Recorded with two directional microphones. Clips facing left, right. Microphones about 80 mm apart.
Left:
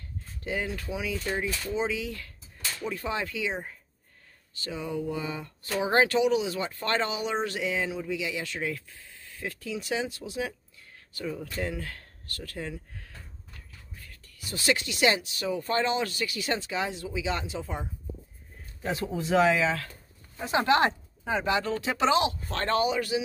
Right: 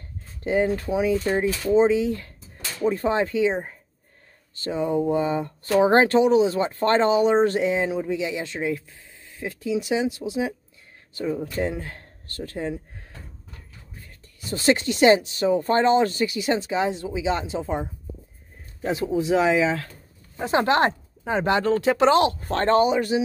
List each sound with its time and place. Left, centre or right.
0.4 s speech: right
13.9 s speech: right
16.3 s speech: centre
18.9 s speech: centre
20.3 s speech: right
22.6 s speech: right